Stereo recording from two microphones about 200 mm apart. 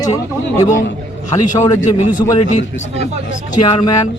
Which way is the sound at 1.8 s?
40° left (ahead or behind).